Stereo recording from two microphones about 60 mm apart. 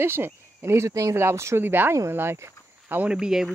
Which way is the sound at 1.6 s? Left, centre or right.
Right.